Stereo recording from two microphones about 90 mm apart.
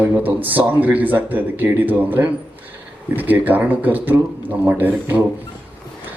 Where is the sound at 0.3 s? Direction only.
20° right (ahead or behind).